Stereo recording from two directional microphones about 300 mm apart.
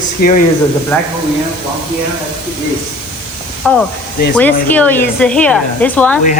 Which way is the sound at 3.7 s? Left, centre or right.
Centre.